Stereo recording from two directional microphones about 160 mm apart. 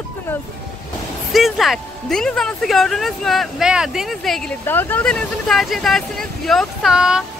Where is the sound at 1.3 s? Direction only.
Centre (ahead or behind).